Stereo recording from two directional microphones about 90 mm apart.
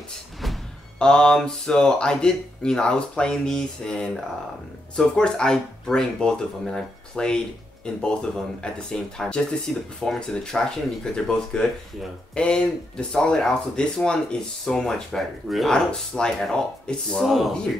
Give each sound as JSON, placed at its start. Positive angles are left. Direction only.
{"t": 0.4, "sound": "speech", "side_deg": 5}